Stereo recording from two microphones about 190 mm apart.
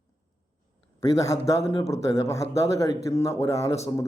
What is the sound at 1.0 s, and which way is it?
A man's voice, 15° left (ahead or behind).